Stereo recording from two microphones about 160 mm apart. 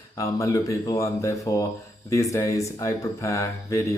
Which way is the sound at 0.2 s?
20° left (ahead or behind).